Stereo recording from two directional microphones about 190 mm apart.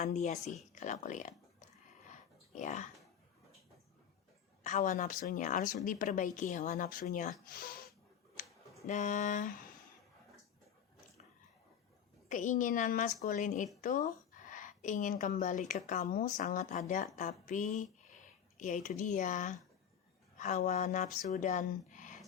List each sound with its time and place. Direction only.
0.0 s a woman's voice: 35° left (ahead or behind)
2.0 s dog: 40° left (ahead or behind)
4.6 s a woman's voice: 40° left (ahead or behind)
8.9 s a woman's voice: 40° left (ahead or behind)
12.3 s a woman's voice: 40° left (ahead or behind)